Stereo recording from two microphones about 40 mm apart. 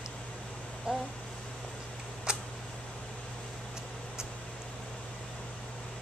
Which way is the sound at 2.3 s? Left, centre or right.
Centre.